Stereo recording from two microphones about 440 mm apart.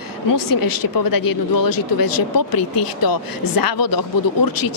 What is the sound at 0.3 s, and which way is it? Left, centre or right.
Speech, left.